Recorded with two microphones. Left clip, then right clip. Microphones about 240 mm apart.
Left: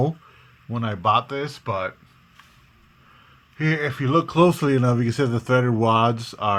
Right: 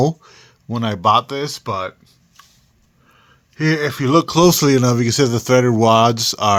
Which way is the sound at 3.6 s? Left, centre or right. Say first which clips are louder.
Right 6 dB; right.